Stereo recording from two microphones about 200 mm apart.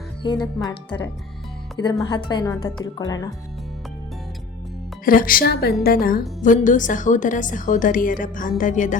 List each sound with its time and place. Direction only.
0.2 s speech: 20° left (ahead or behind)
1.8 s speech: 20° left (ahead or behind)
5.0 s a woman's voice: 45° left (ahead or behind)